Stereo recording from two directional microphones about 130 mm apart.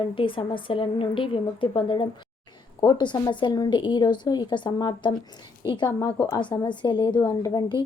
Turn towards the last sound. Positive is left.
turn(degrees=30)  # may be behind; listen again after turning